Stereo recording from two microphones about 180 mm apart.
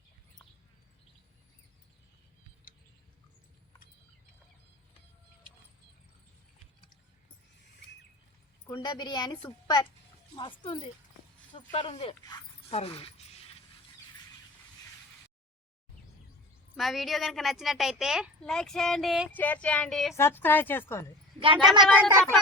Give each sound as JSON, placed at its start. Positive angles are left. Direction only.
{"t": 8.6, "sound": "a woman's voice", "side_deg": 20}
{"t": 16.7, "sound": "a woman's voice", "side_deg": 0}
{"t": 19.3, "sound": "a woman's voice", "side_deg": 10}
{"t": 21.3, "sound": "a woman's voice", "side_deg": -30}